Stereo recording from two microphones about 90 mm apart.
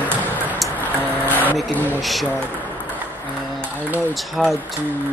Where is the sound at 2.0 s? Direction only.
Centre (ahead or behind).